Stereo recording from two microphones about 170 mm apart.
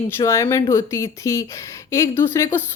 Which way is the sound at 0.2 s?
20° left (ahead or behind).